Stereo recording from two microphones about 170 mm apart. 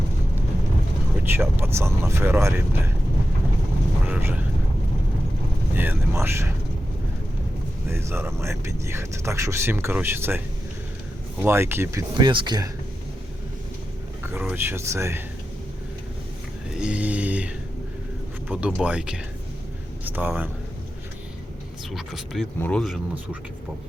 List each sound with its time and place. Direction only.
1.2 s speech: 10° right (ahead or behind)
4.1 s a sound: 10° right (ahead or behind)
5.7 s speech: 10° right (ahead or behind)
7.9 s speech: 15° right (ahead or behind)
14.3 s speech: 10° right (ahead or behind)
16.7 s a sound: 5° right (ahead or behind)
18.4 s speech: 5° right (ahead or behind)
21.9 s speech: centre (ahead or behind)